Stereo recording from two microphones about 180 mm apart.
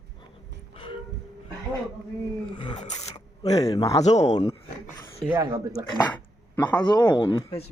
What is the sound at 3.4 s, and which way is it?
Speech, 20° left (ahead or behind).